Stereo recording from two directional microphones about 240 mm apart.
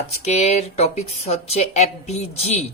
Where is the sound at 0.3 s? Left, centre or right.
Left.